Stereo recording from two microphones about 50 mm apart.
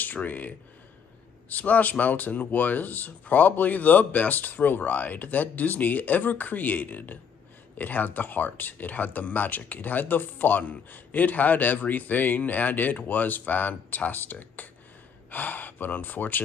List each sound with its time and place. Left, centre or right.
0.0 s speech: left